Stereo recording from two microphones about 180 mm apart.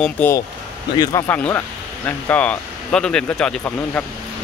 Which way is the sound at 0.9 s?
20° left (ahead or behind).